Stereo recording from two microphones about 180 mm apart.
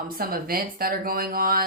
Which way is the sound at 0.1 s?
55° right (ahead or behind).